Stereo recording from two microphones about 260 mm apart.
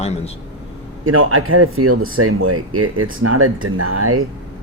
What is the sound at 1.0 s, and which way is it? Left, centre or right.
Speech, right.